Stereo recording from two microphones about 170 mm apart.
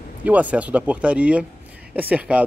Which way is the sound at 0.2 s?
10° right (ahead or behind).